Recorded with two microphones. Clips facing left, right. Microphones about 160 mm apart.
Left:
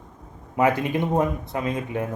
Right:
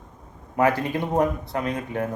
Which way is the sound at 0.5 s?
20° left (ahead or behind).